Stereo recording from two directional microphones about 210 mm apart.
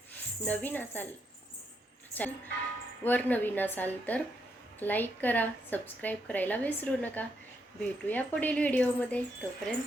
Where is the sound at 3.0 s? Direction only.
10° left (ahead or behind).